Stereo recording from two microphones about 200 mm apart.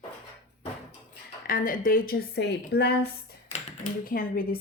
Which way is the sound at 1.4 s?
45° left (ahead or behind).